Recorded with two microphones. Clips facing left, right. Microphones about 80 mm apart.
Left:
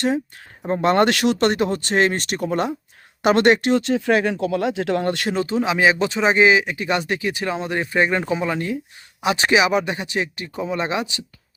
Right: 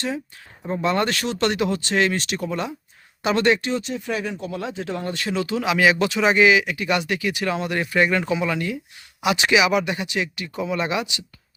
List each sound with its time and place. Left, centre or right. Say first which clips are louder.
0.7 s speech: left 5 dB; left
1.4 s speech: left 3 dB; left
5.3 s speech: right 2 dB; left